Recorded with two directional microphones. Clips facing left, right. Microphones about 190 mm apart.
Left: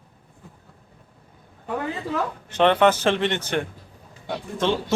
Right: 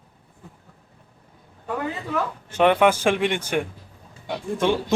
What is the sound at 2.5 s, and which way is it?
A man's voice, 10° right (ahead or behind).